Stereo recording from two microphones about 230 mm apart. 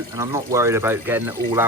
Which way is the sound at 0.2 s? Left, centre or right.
Centre.